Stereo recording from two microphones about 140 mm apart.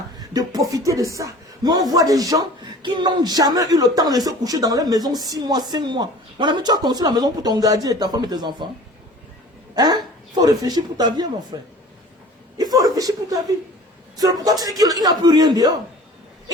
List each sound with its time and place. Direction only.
0.2 s speech: 25° right (ahead or behind)
9.7 s speech: 30° right (ahead or behind)
12.5 s a sound: 25° right (ahead or behind)
14.2 s speech: 25° right (ahead or behind)